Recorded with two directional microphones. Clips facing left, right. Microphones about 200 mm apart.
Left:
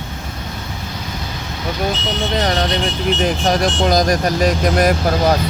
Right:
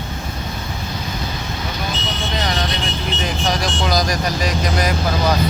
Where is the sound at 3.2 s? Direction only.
50° left (ahead or behind).